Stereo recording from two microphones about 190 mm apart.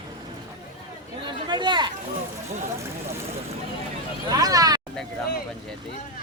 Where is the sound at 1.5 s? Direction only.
25° right (ahead or behind).